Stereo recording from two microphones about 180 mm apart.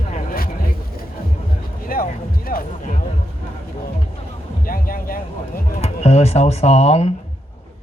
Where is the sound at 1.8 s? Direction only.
50° left (ahead or behind).